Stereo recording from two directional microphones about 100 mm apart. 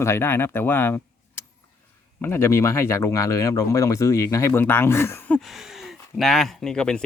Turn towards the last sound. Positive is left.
turn(degrees=10)  # may be behind; listen again after turning